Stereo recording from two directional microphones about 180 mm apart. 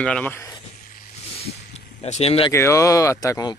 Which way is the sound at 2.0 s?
35° left (ahead or behind).